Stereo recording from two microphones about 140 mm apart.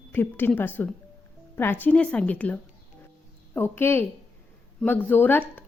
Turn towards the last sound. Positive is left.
turn(degrees=15)  # may be behind; listen again after turning